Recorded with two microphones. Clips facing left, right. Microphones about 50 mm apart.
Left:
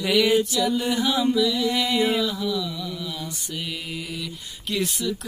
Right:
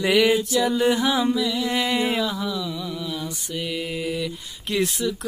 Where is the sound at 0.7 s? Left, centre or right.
Right.